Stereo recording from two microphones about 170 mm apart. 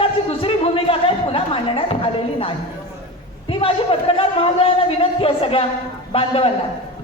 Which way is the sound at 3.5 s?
30° left (ahead or behind).